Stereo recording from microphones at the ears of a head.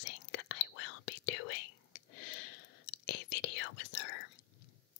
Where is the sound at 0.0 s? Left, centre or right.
Left.